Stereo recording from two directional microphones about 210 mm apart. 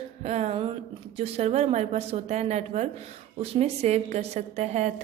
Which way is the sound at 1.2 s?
30° right (ahead or behind).